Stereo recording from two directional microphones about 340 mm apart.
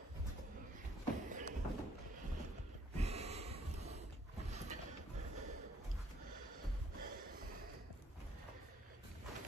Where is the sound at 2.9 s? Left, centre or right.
Centre.